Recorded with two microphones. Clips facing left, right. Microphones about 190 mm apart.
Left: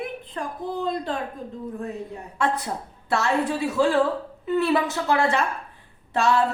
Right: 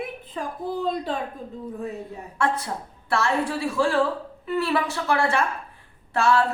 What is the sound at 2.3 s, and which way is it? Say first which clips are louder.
A woman's voice: even; 20° left (ahead or behind).